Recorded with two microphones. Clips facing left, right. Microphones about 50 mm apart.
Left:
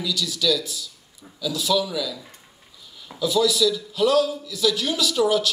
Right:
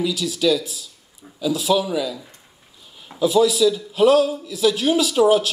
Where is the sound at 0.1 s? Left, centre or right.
Right.